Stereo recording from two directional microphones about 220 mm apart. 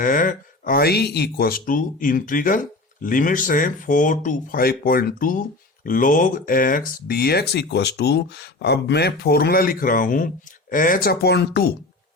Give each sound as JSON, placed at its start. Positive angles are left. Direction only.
{"t": 0.0, "sound": "speech", "side_deg": 40}